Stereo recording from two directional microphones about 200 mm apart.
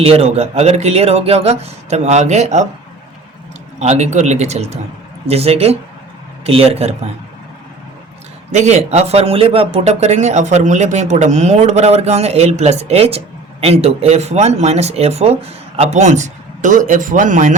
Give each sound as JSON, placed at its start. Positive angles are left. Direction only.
{"t": 0.0, "sound": "speech", "side_deg": -30}
{"t": 3.8, "sound": "a man's voice", "side_deg": -35}
{"t": 8.5, "sound": "speech", "side_deg": -35}